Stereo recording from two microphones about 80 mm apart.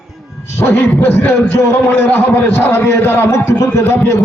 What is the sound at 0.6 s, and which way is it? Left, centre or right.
A man's voice, left.